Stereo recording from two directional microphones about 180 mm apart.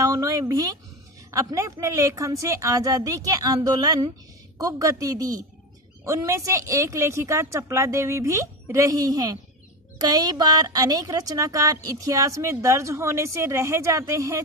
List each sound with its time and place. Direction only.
0.0 s a woman's voice: 20° right (ahead or behind)